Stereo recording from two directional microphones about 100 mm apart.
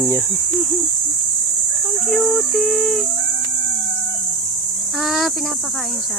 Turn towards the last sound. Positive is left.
turn(degrees=0)  # may be behind; listen again after turning